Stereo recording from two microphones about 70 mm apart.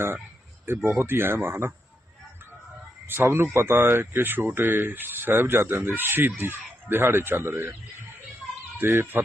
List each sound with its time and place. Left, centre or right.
0.9 s speech: right
3.1 s speech: right